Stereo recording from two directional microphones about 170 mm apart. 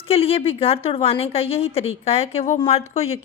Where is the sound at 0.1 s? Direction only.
35° left (ahead or behind).